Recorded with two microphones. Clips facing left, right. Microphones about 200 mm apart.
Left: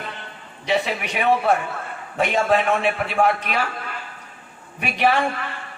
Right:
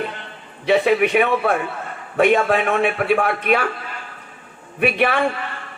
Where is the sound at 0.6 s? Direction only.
55° right (ahead or behind).